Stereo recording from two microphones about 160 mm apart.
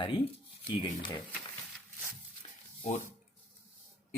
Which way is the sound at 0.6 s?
30° left (ahead or behind).